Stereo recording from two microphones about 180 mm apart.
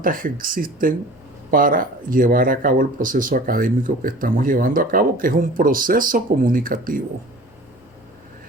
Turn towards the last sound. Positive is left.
turn(degrees=-50)  # may be behind; listen again after turning